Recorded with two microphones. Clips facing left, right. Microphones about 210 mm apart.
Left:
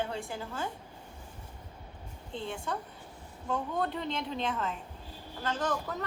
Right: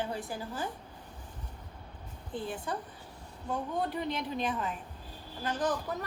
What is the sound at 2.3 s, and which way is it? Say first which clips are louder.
Speech: right 1 dB; 25° left (ahead or behind).